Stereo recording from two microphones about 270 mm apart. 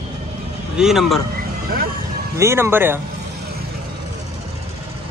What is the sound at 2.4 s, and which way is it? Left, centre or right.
Speech, centre.